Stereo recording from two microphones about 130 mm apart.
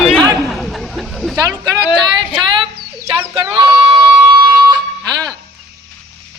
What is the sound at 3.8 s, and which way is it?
Music, 50° right (ahead or behind).